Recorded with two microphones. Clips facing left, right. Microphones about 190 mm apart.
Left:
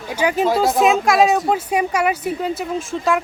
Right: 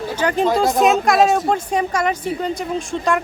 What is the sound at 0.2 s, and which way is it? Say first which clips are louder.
Speech: even; 5° left (ahead or behind).